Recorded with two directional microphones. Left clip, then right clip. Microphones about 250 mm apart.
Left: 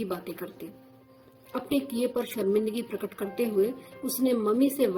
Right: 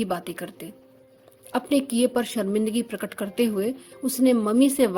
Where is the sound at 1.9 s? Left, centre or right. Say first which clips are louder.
Right 6 dB; right.